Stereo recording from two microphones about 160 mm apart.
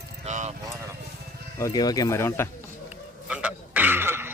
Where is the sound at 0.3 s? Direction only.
45° right (ahead or behind).